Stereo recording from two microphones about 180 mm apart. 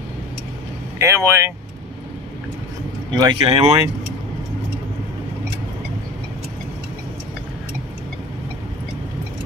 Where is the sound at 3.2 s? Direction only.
25° right (ahead or behind).